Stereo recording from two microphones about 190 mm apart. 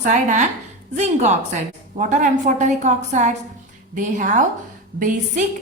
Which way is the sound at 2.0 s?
40° right (ahead or behind).